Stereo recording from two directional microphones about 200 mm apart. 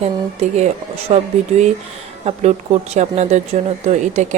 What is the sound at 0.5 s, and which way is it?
Speech, 30° right (ahead or behind).